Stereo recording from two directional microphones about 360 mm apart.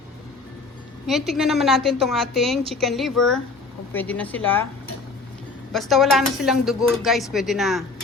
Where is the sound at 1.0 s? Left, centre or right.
Centre.